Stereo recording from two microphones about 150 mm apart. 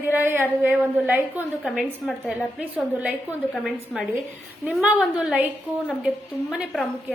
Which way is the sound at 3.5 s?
5° left (ahead or behind).